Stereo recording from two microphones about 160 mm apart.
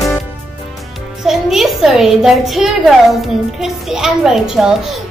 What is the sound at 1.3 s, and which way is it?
A woman's voice, centre (ahead or behind).